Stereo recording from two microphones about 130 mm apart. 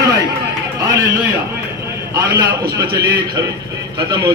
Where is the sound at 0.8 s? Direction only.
25° right (ahead or behind).